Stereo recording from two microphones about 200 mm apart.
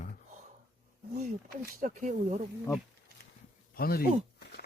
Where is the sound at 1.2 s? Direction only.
40° right (ahead or behind).